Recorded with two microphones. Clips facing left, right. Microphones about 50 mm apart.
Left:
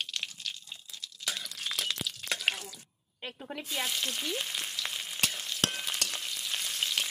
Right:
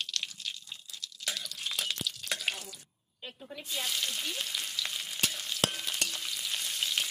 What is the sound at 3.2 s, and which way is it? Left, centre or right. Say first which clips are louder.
Speech: left 4 dB; left.